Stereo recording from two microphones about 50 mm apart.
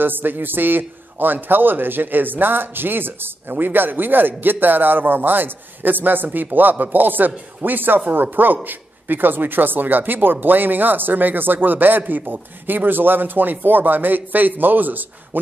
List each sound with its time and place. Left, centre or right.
0.0 s a man's voice: right